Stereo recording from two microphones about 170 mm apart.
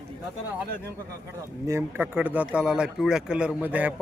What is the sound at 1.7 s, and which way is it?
Speech, 15° right (ahead or behind).